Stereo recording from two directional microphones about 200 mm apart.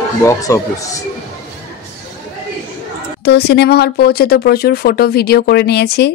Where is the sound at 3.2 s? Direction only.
55° left (ahead or behind).